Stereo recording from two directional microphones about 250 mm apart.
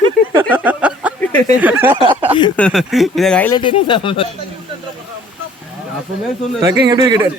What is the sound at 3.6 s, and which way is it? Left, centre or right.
Speech, centre.